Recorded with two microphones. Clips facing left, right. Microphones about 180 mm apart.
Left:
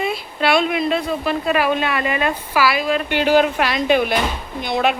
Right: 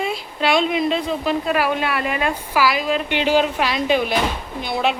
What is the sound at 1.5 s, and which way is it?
Speech, 10° right (ahead or behind).